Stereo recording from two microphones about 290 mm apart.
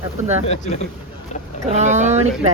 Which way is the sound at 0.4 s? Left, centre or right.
Left.